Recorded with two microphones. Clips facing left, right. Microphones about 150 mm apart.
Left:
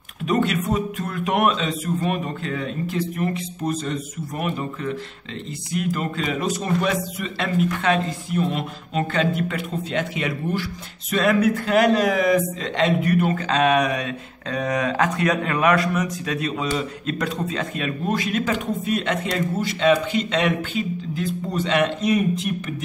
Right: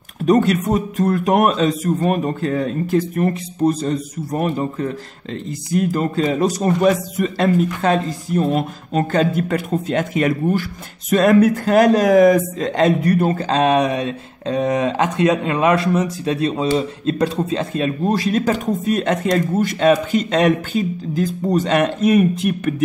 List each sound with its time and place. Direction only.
0.2 s speech: 40° right (ahead or behind)